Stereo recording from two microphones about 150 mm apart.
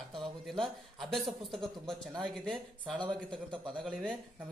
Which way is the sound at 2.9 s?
30° right (ahead or behind).